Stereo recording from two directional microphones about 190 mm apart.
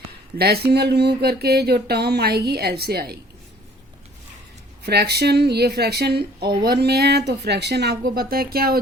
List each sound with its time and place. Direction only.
0.3 s speech: 55° right (ahead or behind)
4.9 s speech: 60° right (ahead or behind)